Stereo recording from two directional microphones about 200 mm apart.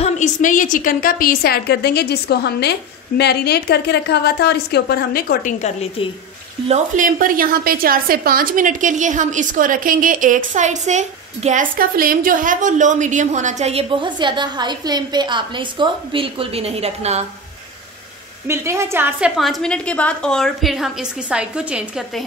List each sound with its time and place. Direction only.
0.0 s a woman's voice: 40° left (ahead or behind)
5.6 s a woman's voice: 30° left (ahead or behind)
6.7 s a woman's voice: 40° right (ahead or behind)
18.5 s a woman's voice: 15° right (ahead or behind)